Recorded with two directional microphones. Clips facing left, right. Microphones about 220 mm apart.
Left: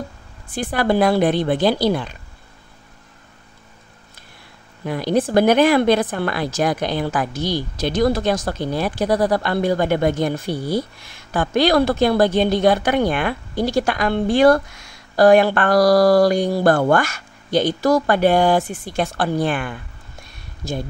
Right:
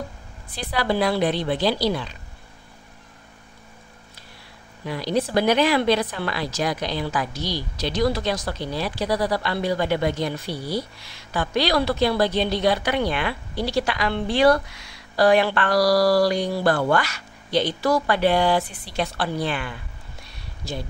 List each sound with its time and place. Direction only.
0.5 s speech: 50° left (ahead or behind)
4.8 s speech: 50° left (ahead or behind)
20.2 s a sound: 50° left (ahead or behind)